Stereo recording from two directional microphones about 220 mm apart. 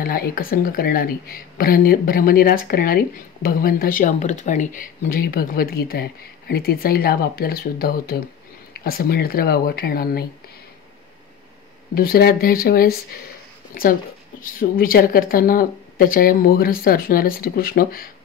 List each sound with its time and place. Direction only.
0.0 s a woman's voice: 45° left (ahead or behind)
11.9 s a woman's voice: 45° left (ahead or behind)
14.4 s speech: 40° left (ahead or behind)